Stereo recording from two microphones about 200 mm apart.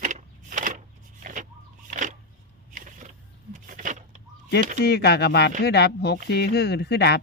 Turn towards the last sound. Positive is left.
turn(degrees=55)  # may be behind; listen again after turning